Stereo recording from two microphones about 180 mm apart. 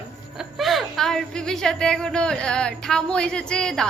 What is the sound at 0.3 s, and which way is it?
Speech, centre (ahead or behind).